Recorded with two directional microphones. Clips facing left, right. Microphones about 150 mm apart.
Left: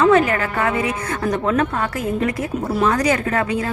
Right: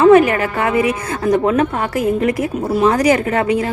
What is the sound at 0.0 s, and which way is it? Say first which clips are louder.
A woman's voice: right 5 dB; 20° right (ahead or behind).